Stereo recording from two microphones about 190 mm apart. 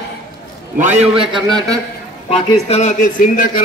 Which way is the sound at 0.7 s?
40° right (ahead or behind).